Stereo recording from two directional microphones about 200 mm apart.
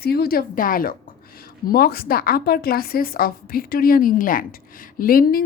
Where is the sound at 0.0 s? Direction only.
50° left (ahead or behind).